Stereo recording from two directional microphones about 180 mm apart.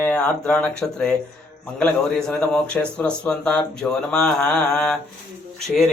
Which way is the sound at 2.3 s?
5° left (ahead or behind).